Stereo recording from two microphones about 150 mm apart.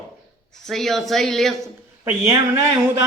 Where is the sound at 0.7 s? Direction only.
Centre (ahead or behind).